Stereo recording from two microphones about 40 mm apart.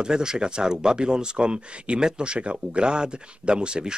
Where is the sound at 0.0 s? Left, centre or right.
Centre.